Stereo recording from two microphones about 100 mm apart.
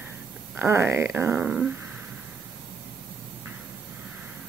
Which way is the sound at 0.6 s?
25° right (ahead or behind).